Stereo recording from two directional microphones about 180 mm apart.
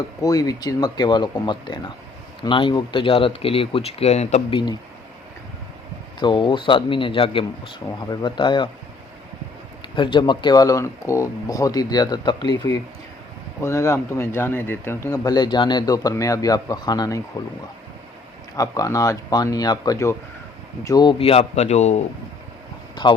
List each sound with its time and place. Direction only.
0.2 s speech: 20° left (ahead or behind); by 4.4 s 40° left (ahead or behind)
4.5 s speech: 25° left (ahead or behind)
6.1 s speech: 25° left (ahead or behind)
9.8 s speech: 25° left (ahead or behind)
18.5 s speech: 20° left (ahead or behind); by 22.0 s 40° left (ahead or behind)
23.0 s speech: 25° left (ahead or behind)